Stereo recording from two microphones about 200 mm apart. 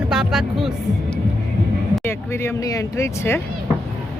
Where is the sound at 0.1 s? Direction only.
5° right (ahead or behind).